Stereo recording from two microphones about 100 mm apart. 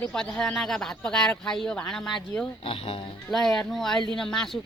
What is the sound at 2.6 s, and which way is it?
Speech, 65° left (ahead or behind).